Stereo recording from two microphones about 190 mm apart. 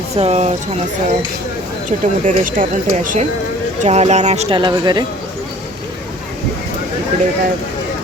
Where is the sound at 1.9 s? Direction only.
45° right (ahead or behind); by 5.0 s 25° right (ahead or behind).